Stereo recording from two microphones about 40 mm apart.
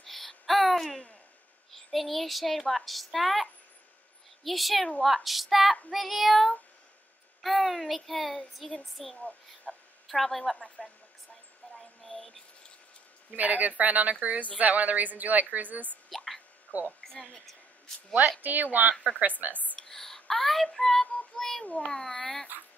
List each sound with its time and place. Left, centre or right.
0.0 s babbling: centre
1.7 s a child's voice: centre
9.1 s speech: left
10.0 s a child's voice: centre
11.7 s a sound: centre
13.4 s speech: right
16.7 s a woman's voice: left
17.0 s a woman's voice: centre
18.4 s speech: right
19.8 s female singing: centre
21.4 s a child's voice: centre
22.5 s speech: right